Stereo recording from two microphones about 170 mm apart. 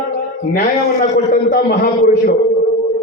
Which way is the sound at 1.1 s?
55° left (ahead or behind).